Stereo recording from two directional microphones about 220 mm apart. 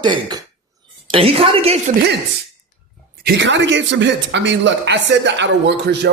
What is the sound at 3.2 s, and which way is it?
Speech, 55° right (ahead or behind).